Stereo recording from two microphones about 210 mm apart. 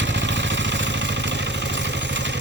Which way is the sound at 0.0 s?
60° right (ahead or behind).